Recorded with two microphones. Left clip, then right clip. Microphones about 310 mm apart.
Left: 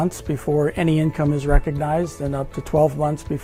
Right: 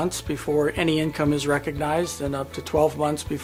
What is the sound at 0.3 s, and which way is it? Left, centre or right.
Speech, left.